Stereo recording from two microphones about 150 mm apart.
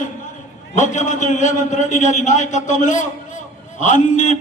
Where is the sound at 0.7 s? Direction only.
55° left (ahead or behind).